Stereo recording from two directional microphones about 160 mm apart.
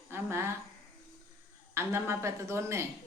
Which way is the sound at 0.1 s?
15° right (ahead or behind).